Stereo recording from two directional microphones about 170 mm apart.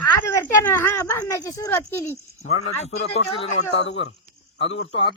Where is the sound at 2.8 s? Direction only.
35° left (ahead or behind).